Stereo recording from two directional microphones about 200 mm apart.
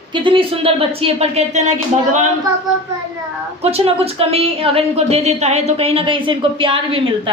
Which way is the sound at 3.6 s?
30° right (ahead or behind).